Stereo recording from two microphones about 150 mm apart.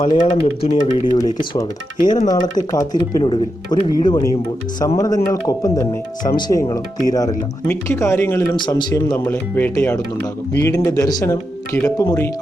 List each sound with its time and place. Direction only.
0.0 s speech: 35° left (ahead or behind)
2.2 s speech: 25° left (ahead or behind)
8.5 s speech: 30° left (ahead or behind)